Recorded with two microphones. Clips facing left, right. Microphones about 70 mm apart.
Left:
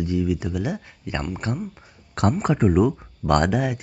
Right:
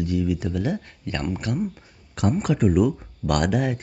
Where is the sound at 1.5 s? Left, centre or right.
Left.